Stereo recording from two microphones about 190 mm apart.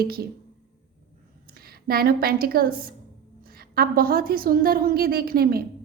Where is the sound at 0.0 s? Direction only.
50° right (ahead or behind).